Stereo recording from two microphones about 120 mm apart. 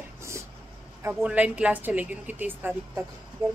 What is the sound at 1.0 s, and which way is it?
A woman's voice, 10° right (ahead or behind).